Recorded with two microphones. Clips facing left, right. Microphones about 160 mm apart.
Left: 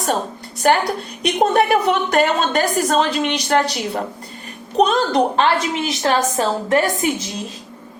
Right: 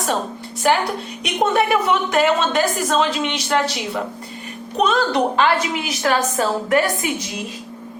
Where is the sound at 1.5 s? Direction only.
40° left (ahead or behind).